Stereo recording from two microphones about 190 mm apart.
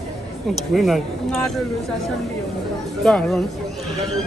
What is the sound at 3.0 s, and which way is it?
Speech, centre (ahead or behind).